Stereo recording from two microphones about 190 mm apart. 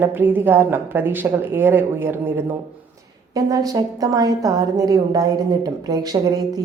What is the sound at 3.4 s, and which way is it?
A woman's voice, 20° right (ahead or behind).